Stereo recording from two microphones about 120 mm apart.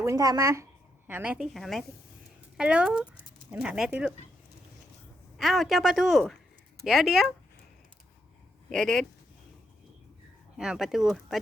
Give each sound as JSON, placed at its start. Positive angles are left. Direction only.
{"t": 0.0, "sound": "speech", "side_deg": -25}
{"t": 1.0, "sound": "speech", "side_deg": -15}
{"t": 1.5, "sound": "speech", "side_deg": 0}
{"t": 5.4, "sound": "speech", "side_deg": 0}
{"t": 8.7, "sound": "speech", "side_deg": 5}
{"t": 10.6, "sound": "speech", "side_deg": -5}